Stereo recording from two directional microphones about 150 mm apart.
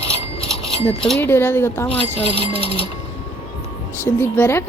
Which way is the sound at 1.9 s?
40° left (ahead or behind).